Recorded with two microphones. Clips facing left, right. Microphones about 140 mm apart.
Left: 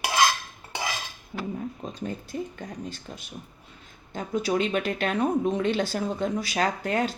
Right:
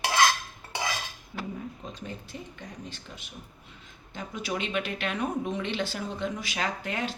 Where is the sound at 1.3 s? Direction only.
45° left (ahead or behind).